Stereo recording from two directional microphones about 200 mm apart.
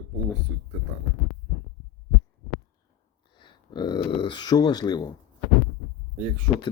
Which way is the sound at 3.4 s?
20° left (ahead or behind).